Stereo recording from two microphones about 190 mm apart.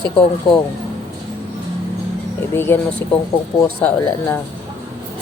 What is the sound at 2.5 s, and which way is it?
Speech, 10° left (ahead or behind).